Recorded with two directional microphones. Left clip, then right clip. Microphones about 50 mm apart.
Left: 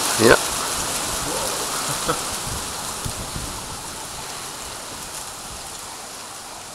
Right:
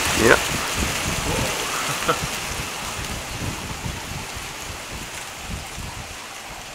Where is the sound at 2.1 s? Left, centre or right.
Right.